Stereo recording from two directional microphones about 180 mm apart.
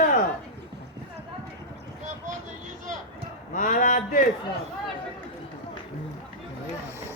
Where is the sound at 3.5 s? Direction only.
45° left (ahead or behind).